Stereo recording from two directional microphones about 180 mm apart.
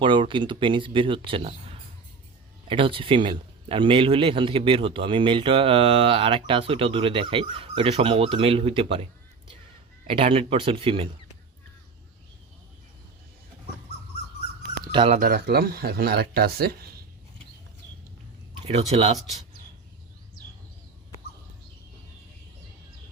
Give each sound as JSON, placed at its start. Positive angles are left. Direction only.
{"t": 0.0, "sound": "a man's voice", "side_deg": -25}
{"t": 2.6, "sound": "a man's voice", "side_deg": -30}
{"t": 10.1, "sound": "speech", "side_deg": -30}
{"t": 14.9, "sound": "speech", "side_deg": -30}
{"t": 15.2, "sound": "speech", "side_deg": -60}
{"t": 18.6, "sound": "speech", "side_deg": -35}